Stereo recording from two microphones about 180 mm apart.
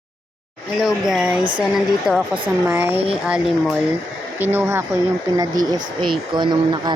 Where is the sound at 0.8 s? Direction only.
5° right (ahead or behind).